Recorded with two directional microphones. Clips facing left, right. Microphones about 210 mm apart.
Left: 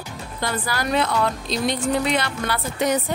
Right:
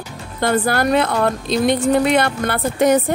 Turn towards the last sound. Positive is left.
turn(degrees=-50)  # may be behind; listen again after turning